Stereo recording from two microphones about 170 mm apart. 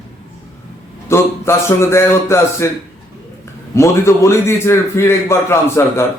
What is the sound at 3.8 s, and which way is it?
A man's voice, 15° left (ahead or behind).